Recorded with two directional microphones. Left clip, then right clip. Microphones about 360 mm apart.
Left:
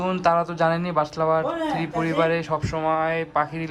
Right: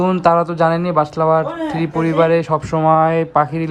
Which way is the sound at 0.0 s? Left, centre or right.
Centre.